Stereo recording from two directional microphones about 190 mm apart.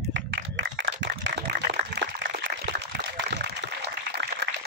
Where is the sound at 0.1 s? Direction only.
75° right (ahead or behind).